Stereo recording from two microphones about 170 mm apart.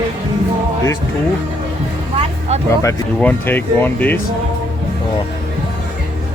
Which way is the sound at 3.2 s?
10° left (ahead or behind).